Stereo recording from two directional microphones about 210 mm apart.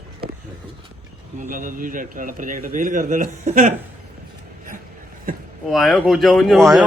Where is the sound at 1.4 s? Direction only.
40° right (ahead or behind).